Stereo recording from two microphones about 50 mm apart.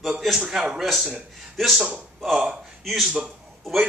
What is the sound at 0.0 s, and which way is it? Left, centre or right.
Speech, centre.